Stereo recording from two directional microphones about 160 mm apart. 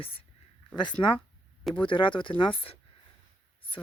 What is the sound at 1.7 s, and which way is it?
Speech, 30° left (ahead or behind).